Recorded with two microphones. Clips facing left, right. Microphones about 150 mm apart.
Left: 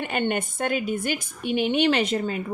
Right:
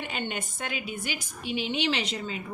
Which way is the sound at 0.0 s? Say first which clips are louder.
Left 8 dB; 55° left (ahead or behind).